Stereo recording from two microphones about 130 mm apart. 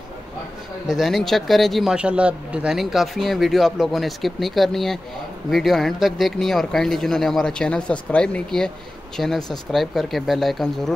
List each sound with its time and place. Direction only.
0.9 s speech: centre (ahead or behind)